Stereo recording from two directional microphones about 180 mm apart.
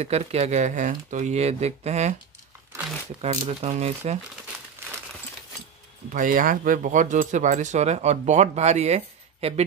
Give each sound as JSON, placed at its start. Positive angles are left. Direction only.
{"t": 0.0, "sound": "speech", "side_deg": -35}
{"t": 3.2, "sound": "speech", "side_deg": -35}
{"t": 6.1, "sound": "speech", "side_deg": -50}